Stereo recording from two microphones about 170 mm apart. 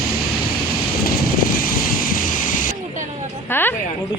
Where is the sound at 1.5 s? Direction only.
55° left (ahead or behind).